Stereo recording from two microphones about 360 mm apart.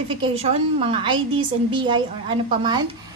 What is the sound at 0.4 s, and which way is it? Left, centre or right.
A woman's voice, centre.